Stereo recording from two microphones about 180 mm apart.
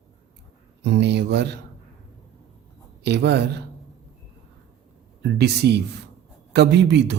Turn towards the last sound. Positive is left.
turn(degrees=-75)  # may be behind; listen again after turning